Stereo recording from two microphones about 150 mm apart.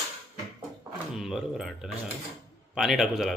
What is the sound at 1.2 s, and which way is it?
Speech, 5° right (ahead or behind).